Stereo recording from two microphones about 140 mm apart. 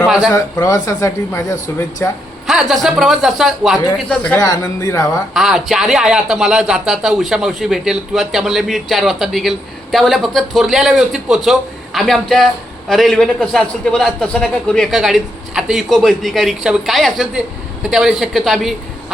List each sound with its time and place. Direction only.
0.0 s a sound: centre (ahead or behind)
0.3 s speech: 25° left (ahead or behind)
2.5 s speech: centre (ahead or behind)
4.4 s speech: 25° left (ahead or behind)
5.3 s speech: centre (ahead or behind)